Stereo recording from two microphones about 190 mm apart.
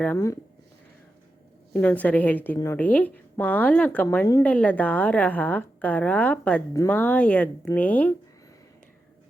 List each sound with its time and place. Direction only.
0.0 s a woman's voice: 15° left (ahead or behind)
1.7 s a woman's voice: 10° left (ahead or behind)